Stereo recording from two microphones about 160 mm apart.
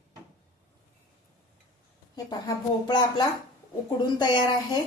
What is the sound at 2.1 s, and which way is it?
Speech, 25° left (ahead or behind).